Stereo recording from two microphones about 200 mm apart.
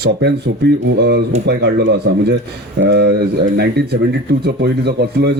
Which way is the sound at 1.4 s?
60° right (ahead or behind).